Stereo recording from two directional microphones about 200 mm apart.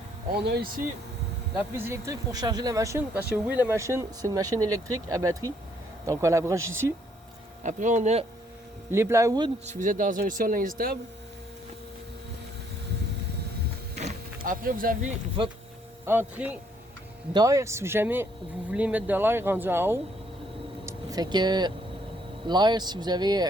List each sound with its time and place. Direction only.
0.4 s speech: 55° right (ahead or behind)
1.5 s speech: 10° right (ahead or behind)
7.6 s speech: 40° right (ahead or behind)
8.9 s speech: 10° right (ahead or behind)
9.6 s speech: 40° right (ahead or behind)
13.9 s power windows: 40° right (ahead or behind)
16.0 s speech: 10° right (ahead or behind)